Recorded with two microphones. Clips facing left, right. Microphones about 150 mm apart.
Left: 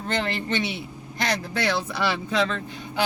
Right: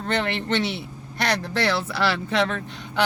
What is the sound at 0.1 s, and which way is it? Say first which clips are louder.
Speech: right 2 dB; 70° right (ahead or behind).